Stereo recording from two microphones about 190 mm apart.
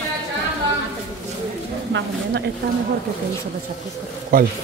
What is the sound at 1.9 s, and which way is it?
Speech, 65° right (ahead or behind).